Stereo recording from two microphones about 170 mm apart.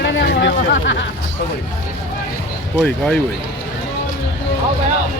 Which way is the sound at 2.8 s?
5° left (ahead or behind).